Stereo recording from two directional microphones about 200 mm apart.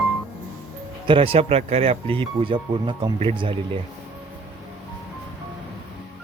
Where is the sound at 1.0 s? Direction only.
25° right (ahead or behind).